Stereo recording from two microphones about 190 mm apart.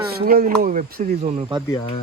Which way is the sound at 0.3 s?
50° right (ahead or behind).